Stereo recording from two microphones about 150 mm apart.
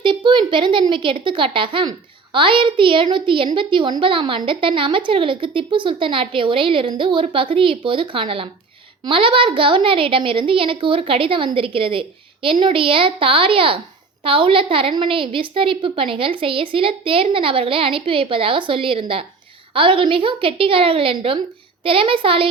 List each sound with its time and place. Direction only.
0.0 s a woman's voice: 30° right (ahead or behind)